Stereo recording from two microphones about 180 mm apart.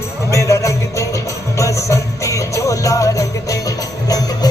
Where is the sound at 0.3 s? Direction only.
15° left (ahead or behind).